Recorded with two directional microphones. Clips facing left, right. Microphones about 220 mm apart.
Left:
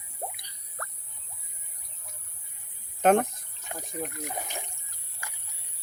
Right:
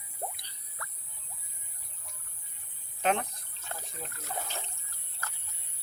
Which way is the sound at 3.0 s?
50° left (ahead or behind).